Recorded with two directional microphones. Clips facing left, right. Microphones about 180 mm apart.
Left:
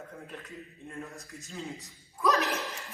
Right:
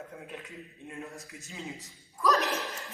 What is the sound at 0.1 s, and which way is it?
Speech, 10° right (ahead or behind).